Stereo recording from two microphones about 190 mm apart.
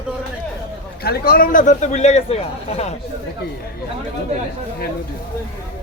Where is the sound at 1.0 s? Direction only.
50° left (ahead or behind); by 2.9 s 30° left (ahead or behind).